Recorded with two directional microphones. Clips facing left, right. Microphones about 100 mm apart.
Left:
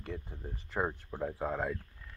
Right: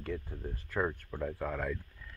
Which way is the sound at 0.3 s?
20° left (ahead or behind).